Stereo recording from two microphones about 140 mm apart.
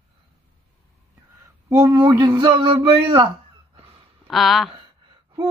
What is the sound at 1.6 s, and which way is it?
A man's voice, 30° right (ahead or behind).